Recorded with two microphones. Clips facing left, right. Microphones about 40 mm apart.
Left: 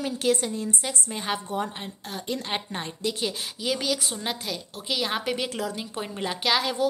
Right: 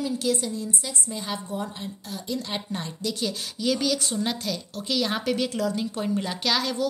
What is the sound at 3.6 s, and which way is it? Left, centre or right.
A woman's voice, centre.